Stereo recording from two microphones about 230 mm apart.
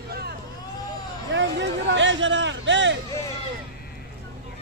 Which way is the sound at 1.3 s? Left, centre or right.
Right.